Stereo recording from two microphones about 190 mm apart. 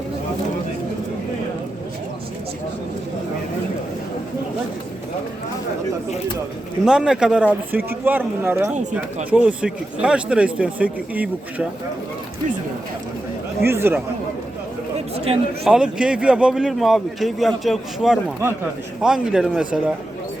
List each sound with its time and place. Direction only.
6.8 s a man's voice: 5° right (ahead or behind)
8.7 s speech: 40° right (ahead or behind)
9.3 s a man's voice: 5° right (ahead or behind)
13.7 s a man's voice: 10° right (ahead or behind)
15.1 s speech: 30° right (ahead or behind)
15.6 s a man's voice: 5° right (ahead or behind)